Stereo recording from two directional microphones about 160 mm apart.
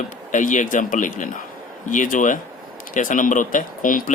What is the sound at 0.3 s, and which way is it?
Speech, 50° left (ahead or behind).